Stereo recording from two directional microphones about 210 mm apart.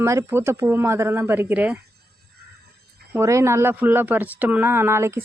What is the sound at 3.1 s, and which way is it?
Speech, 15° right (ahead or behind).